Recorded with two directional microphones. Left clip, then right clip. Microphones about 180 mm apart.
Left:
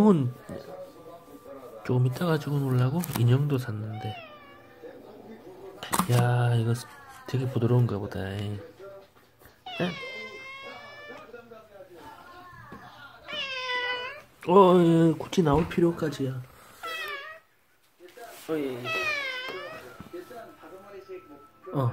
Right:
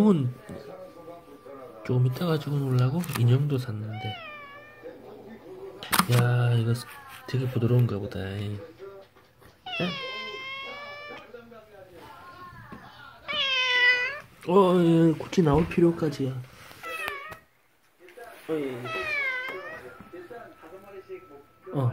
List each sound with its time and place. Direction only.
0.0 s speech: 10° left (ahead or behind)
1.8 s a sound: 10° left (ahead or behind)
2.1 s speech: 5° left (ahead or behind)
5.8 s speech: 5° left (ahead or behind)
9.7 s cat: 10° left (ahead or behind)
13.3 s cat: 5° left (ahead or behind)
14.4 s speech: 15° left (ahead or behind)
14.9 s speech: centre (ahead or behind)
15.7 s speech: 15° right (ahead or behind)
18.5 s speech: centre (ahead or behind)
18.9 s cat: 25° left (ahead or behind)